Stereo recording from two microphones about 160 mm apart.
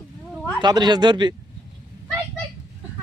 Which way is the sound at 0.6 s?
25° right (ahead or behind).